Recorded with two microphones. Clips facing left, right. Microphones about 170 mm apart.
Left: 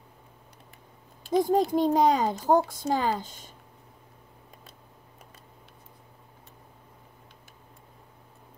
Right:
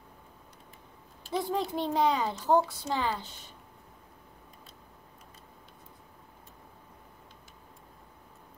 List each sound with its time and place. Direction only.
1.3 s a child's voice: 45° left (ahead or behind)